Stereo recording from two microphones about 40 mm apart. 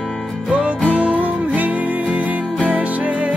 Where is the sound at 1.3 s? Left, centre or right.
Right.